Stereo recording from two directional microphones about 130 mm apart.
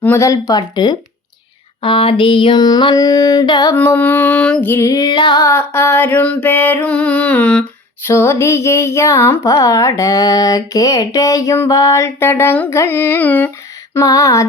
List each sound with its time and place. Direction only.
0.0 s music: 20° left (ahead or behind)
1.8 s a sound: 40° left (ahead or behind)
3.8 s music: 15° left (ahead or behind); by 5.5 s 35° left (ahead or behind)
5.5 s music: 20° left (ahead or behind)
13.9 s music: 25° left (ahead or behind)